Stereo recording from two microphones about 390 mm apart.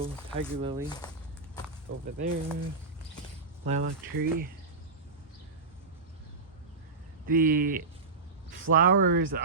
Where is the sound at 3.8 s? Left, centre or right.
Right.